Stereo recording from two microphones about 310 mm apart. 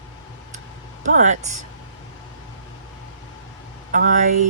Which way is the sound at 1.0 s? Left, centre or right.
Right.